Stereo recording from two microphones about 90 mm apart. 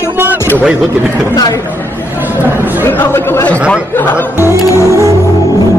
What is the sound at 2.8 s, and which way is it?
Speech, 25° left (ahead or behind).